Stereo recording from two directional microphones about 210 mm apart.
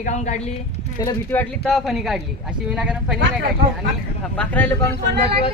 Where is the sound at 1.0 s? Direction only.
10° left (ahead or behind).